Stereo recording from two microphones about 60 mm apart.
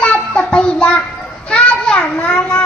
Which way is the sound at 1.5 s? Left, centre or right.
Centre.